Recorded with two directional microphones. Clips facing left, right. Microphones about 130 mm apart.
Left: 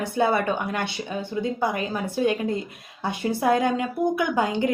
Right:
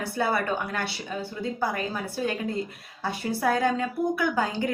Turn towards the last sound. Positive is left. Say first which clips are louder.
# left 3 dB
turn(degrees=20)  # may be behind; listen again after turning